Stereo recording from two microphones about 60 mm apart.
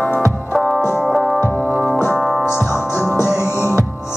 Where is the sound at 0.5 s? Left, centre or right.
Centre.